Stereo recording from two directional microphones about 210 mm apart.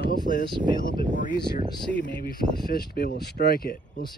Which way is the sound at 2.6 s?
45° left (ahead or behind).